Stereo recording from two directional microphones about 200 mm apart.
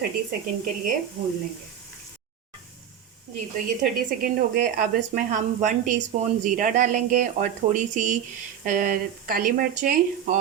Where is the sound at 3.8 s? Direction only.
40° right (ahead or behind).